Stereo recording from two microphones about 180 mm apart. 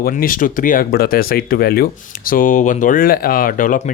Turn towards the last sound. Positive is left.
turn(degrees=50)  # may be behind; listen again after turning